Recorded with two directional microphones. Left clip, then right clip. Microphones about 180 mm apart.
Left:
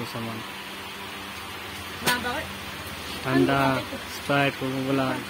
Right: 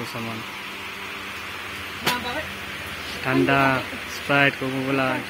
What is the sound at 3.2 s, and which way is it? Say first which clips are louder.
Speech: right 3 dB; 5° right (ahead or behind).